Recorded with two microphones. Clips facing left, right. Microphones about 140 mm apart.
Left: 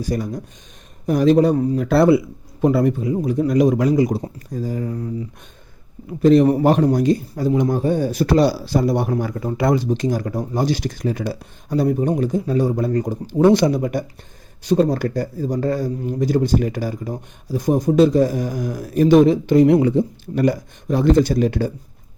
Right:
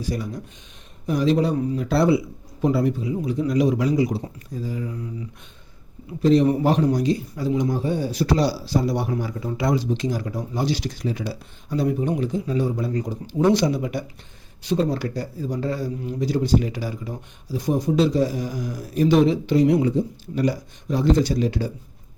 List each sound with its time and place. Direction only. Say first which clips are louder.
0.0 s a man's voice: left 4 dB; 45° left (ahead or behind)
6.2 s a man's voice: left 4 dB; 55° left (ahead or behind)